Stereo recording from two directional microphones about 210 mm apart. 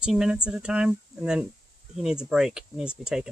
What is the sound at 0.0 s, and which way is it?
Speech, 5° right (ahead or behind).